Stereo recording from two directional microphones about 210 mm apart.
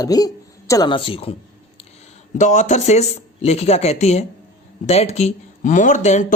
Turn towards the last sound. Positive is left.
turn(degrees=35)  # may be behind; listen again after turning